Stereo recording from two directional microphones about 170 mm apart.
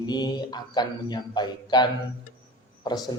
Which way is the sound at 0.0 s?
25° left (ahead or behind).